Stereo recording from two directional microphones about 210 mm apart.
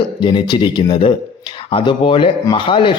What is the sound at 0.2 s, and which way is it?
Speech, 20° left (ahead or behind).